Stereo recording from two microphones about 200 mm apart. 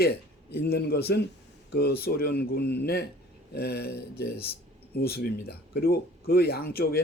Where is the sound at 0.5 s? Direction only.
55° left (ahead or behind).